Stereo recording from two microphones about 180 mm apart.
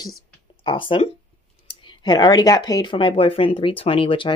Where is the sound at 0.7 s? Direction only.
30° left (ahead or behind).